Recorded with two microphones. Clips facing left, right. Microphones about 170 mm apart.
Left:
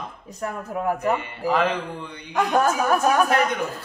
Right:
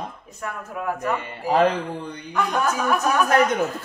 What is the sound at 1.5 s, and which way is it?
Speech, 40° right (ahead or behind).